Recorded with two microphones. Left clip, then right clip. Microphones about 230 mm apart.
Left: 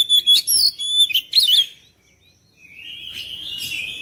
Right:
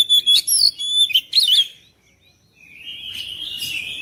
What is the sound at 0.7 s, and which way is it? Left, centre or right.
Bird, centre.